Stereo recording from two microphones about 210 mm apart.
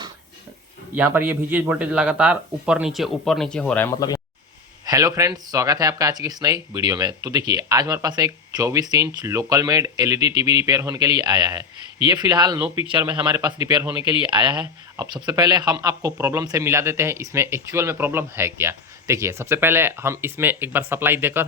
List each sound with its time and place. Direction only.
1.1 s a man's voice: 10° right (ahead or behind); by 4.2 s 15° left (ahead or behind)
4.9 s speech: 15° right (ahead or behind)
13.1 s speech: 10° right (ahead or behind)